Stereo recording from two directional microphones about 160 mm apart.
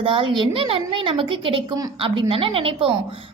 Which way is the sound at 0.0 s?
30° right (ahead or behind).